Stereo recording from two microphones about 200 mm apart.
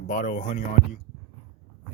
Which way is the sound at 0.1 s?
40° left (ahead or behind).